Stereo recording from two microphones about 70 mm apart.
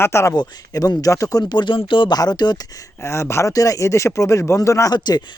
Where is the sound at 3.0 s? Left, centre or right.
Left.